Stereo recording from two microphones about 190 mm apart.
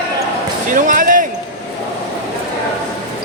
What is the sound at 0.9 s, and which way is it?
Basketball bounce, 45° right (ahead or behind).